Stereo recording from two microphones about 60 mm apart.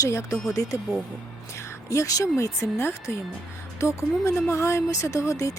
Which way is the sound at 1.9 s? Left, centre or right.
Left.